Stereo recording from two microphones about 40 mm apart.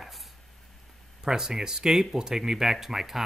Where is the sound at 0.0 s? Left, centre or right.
Centre.